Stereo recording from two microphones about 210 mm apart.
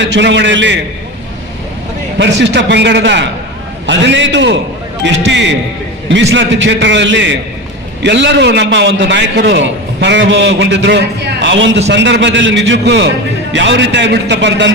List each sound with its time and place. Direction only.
0.0 s a man's voice: 60° right (ahead or behind)
2.4 s a man's voice: 60° right (ahead or behind)